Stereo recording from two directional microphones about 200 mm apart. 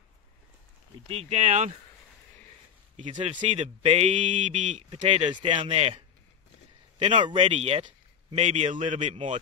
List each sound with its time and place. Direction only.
1.0 s speech: 30° right (ahead or behind)
3.0 s speech: 35° right (ahead or behind)